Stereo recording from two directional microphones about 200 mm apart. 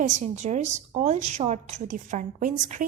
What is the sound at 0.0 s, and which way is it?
A woman's voice, 40° right (ahead or behind).